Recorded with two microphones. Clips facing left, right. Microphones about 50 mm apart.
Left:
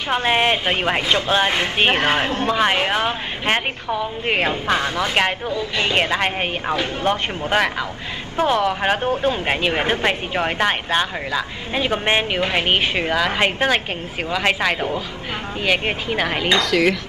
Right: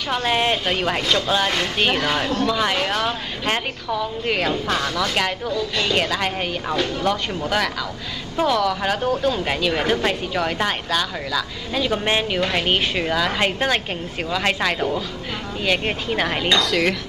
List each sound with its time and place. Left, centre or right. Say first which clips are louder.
0.1 s speech: left 2 dB; left
16.2 s speech: left 1 dB; centre